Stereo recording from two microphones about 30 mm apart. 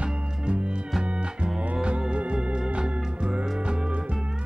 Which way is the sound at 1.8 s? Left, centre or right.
Right.